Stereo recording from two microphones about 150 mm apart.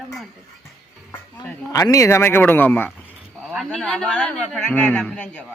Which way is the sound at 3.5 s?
Centre (ahead or behind).